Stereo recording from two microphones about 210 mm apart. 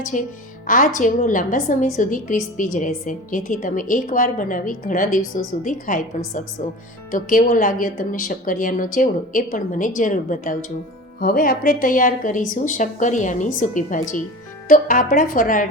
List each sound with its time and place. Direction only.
0.0 s a woman's voice: 40° left (ahead or behind)